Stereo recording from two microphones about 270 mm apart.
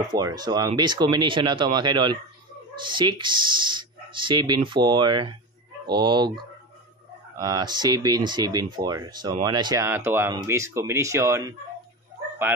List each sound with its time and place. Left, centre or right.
0.0 s speech: centre
7.3 s speech: centre